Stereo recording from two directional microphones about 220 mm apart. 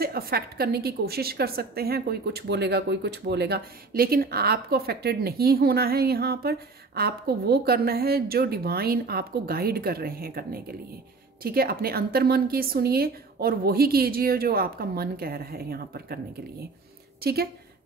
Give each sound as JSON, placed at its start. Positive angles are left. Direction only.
{"t": 0.0, "sound": "a woman's voice", "side_deg": -45}
{"t": 17.2, "sound": "speech", "side_deg": -45}